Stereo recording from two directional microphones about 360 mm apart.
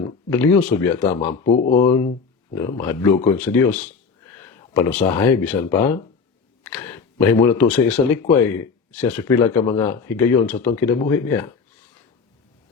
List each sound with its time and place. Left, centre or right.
0.0 s speech: centre
1.5 s speech: centre
4.8 s speech: centre